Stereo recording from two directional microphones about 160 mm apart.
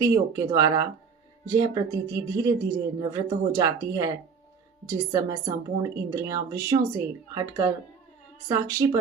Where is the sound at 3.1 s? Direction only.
20° right (ahead or behind).